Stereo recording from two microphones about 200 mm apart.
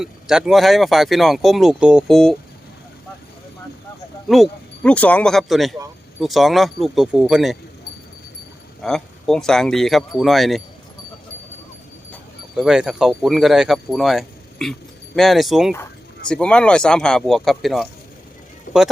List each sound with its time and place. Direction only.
0.0 s speech: centre (ahead or behind)
4.3 s speech: centre (ahead or behind)
8.8 s speech: centre (ahead or behind)
12.1 s speech: centre (ahead or behind)
18.7 s a sound: 40° left (ahead or behind)